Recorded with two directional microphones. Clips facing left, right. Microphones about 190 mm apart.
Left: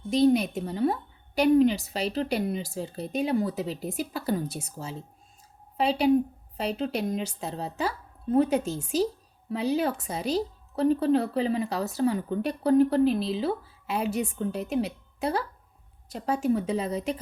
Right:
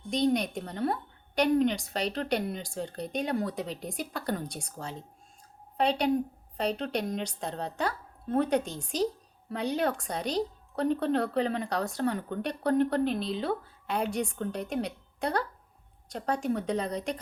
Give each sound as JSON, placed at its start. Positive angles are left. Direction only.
{"t": 0.1, "sound": "speech", "side_deg": 5}